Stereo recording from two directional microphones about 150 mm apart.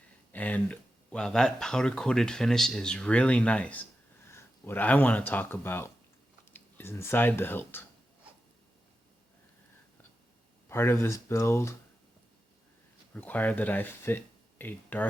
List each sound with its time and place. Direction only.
0.3 s speech: 10° left (ahead or behind)
10.7 s speech: 15° left (ahead or behind)
13.1 s speech: 10° left (ahead or behind)